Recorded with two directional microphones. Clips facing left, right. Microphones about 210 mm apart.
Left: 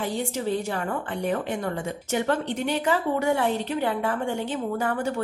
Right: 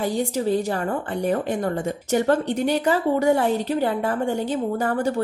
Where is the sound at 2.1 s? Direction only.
40° right (ahead or behind).